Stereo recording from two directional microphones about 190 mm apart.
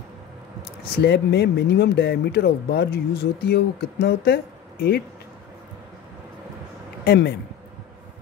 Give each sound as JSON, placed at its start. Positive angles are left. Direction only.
{"t": 0.9, "sound": "speech", "side_deg": 60}
{"t": 7.1, "sound": "speech", "side_deg": 65}